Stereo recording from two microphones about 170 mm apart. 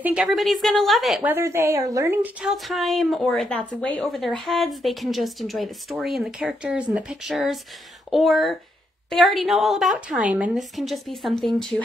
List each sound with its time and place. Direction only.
0.0 s a woman's voice: 5° right (ahead or behind)
2.5 s speech: centre (ahead or behind)